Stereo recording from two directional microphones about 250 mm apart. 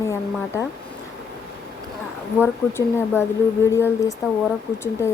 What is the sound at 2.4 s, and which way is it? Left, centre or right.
Speech, centre.